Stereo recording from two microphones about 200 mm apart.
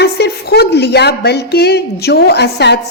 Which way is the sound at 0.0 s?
55° left (ahead or behind).